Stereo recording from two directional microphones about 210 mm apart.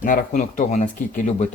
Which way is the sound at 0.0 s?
40° left (ahead or behind).